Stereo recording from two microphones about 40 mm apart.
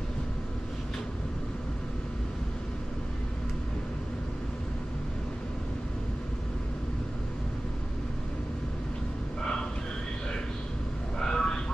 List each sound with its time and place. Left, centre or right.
11.1 s vehicle: centre